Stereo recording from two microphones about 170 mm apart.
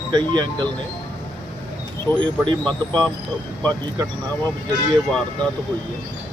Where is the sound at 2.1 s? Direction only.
25° right (ahead or behind).